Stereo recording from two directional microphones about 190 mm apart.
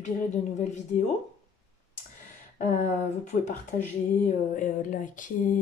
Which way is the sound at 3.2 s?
35° left (ahead or behind).